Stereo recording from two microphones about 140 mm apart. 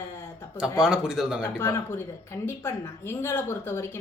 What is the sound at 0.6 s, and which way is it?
Speech, 5° right (ahead or behind).